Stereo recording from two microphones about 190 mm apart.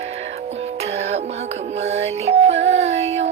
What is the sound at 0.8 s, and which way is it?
Music, 35° right (ahead or behind).